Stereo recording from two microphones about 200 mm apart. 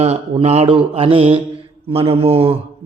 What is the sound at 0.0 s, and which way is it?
A man's voice, 30° right (ahead or behind).